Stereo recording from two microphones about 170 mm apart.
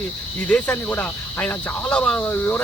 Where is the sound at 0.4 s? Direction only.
10° left (ahead or behind).